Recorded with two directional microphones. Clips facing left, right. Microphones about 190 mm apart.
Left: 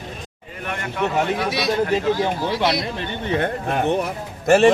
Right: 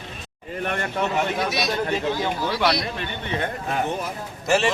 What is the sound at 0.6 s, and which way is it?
Speech, 40° right (ahead or behind).